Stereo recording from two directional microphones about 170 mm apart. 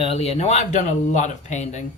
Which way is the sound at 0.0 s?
35° left (ahead or behind).